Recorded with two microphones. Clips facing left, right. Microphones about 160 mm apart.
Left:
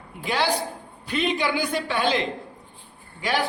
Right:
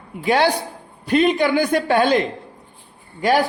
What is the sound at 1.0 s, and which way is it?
A woman's voice, 50° right (ahead or behind).